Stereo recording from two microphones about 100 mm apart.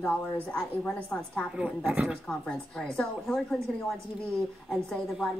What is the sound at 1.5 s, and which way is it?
Speech, 15° right (ahead or behind).